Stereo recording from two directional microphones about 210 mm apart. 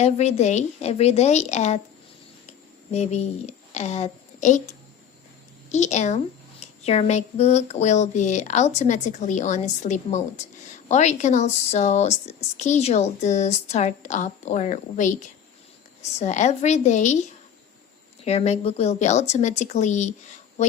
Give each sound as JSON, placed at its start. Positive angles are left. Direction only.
{"t": 0.0, "sound": "a woman's voice", "side_deg": 30}
{"t": 2.9, "sound": "a woman's voice", "side_deg": 30}
{"t": 18.3, "sound": "a woman's voice", "side_deg": 30}